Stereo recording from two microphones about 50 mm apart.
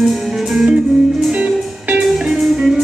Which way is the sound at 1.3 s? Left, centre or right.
Centre.